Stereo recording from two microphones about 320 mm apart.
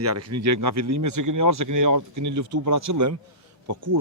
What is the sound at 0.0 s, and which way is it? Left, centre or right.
Speech, right.